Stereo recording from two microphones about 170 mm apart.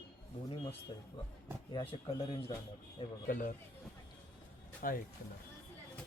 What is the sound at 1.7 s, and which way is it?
A man's voice, 30° left (ahead or behind).